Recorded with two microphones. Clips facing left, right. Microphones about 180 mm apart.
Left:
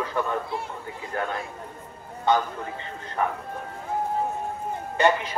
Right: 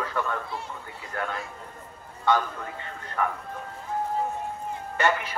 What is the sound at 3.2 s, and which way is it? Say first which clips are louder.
Speech: left 2 dB; 20° left (ahead or behind).